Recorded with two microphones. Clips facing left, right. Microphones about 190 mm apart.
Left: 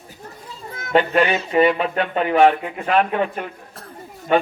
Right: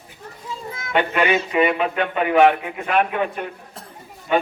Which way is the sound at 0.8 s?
40° left (ahead or behind).